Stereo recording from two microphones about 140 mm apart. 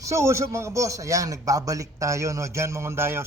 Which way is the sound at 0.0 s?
20° right (ahead or behind).